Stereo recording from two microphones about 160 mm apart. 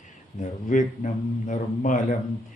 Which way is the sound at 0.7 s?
50° left (ahead or behind).